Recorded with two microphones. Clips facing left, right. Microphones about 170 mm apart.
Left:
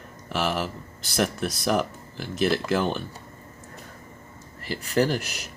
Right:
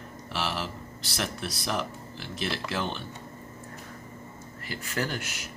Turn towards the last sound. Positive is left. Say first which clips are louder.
# left 9 dB
turn(degrees=35)  # may be behind; listen again after turning